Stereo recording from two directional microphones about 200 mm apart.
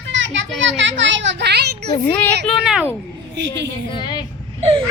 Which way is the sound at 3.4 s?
60° right (ahead or behind).